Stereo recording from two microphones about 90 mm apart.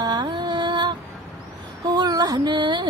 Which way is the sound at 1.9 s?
45° right (ahead or behind).